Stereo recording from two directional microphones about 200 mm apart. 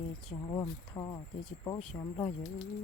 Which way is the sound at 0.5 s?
20° left (ahead or behind).